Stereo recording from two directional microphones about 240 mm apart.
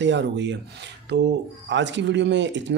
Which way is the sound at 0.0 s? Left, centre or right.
Right.